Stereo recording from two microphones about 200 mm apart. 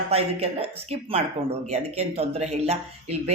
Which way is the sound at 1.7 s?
30° right (ahead or behind).